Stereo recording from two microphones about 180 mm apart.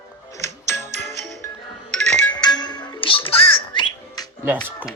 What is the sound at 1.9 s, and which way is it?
Music, 5° left (ahead or behind).